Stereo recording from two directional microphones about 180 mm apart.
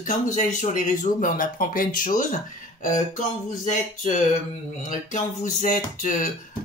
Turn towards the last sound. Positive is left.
turn(degrees=45)  # may be behind; listen again after turning